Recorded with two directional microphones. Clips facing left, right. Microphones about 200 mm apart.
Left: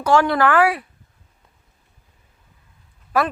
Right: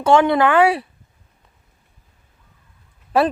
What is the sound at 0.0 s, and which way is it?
Speech, 25° right (ahead or behind).